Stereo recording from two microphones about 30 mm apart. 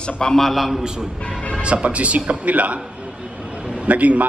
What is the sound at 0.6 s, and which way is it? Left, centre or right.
Speech, centre.